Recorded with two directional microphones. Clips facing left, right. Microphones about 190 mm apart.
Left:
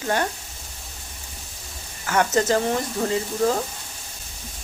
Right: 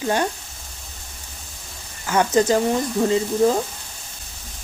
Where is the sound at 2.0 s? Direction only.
15° right (ahead or behind).